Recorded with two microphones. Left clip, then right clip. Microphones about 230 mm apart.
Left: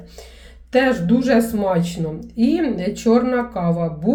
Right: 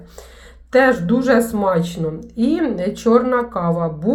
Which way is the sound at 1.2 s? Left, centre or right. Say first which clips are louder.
Right 2 dB; centre.